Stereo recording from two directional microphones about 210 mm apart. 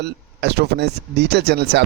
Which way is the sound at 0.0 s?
50° right (ahead or behind).